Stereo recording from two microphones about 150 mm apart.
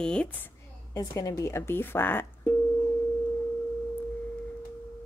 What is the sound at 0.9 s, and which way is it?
Speech, 20° left (ahead or behind).